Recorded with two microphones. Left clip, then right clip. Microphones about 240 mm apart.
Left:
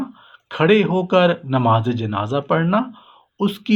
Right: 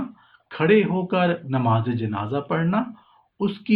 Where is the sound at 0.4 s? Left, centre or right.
Left.